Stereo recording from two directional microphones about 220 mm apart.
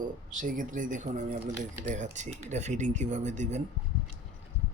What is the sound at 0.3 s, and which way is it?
Speech, 35° right (ahead or behind).